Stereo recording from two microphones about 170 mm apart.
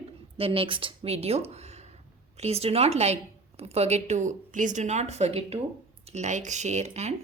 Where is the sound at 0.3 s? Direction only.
35° right (ahead or behind).